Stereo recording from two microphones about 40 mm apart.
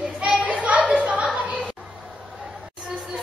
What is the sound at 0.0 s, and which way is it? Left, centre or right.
Children playing, right.